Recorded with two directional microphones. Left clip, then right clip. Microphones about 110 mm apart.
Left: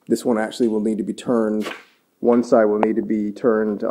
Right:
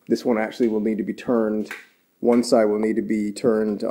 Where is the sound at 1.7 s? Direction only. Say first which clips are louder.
Left 1 dB; 30° right (ahead or behind).